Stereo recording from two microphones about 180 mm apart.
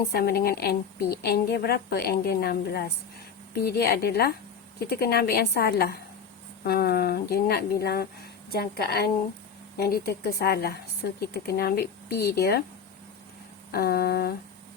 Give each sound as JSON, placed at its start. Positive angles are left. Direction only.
{"t": 0.1, "sound": "a woman's voice", "side_deg": 60}
{"t": 13.7, "sound": "a woman's voice", "side_deg": 60}